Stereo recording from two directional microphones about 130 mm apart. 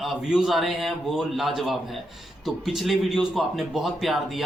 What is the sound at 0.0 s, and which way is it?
Speech, centre (ahead or behind).